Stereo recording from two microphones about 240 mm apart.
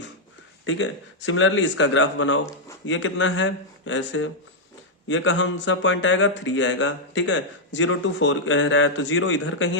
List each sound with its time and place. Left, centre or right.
0.6 s speech: left